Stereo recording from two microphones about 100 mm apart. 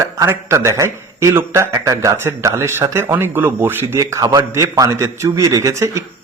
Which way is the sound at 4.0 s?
35° right (ahead or behind).